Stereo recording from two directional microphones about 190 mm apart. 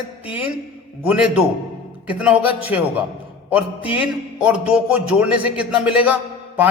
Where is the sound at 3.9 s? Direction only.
5° right (ahead or behind).